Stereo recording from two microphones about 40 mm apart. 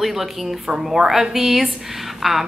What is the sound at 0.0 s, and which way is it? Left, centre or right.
A woman's voice, centre.